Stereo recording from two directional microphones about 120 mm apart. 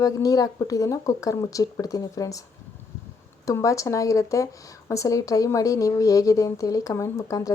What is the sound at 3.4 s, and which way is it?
Speech, 25° left (ahead or behind).